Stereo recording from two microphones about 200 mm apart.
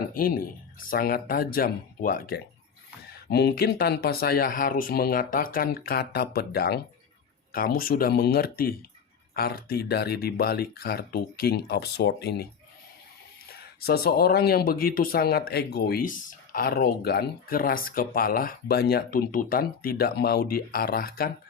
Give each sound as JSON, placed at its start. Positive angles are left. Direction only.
{"t": 0.1, "sound": "speech", "side_deg": 45}
{"t": 13.5, "sound": "speech", "side_deg": 50}